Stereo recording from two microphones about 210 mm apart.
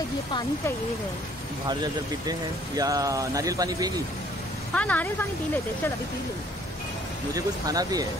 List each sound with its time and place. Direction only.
2.2 s speech: 15° right (ahead or behind)
4.7 s speech: 5° left (ahead or behind)
7.3 s speech: 15° right (ahead or behind)